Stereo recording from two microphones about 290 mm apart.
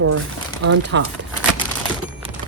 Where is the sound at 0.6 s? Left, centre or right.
Right.